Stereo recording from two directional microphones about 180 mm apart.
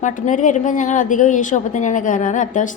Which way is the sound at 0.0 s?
45° left (ahead or behind).